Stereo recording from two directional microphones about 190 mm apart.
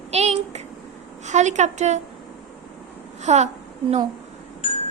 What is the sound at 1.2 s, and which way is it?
Speech, 40° right (ahead or behind).